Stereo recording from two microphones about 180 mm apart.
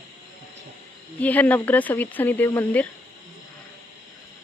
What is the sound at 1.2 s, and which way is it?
Speech, 10° left (ahead or behind).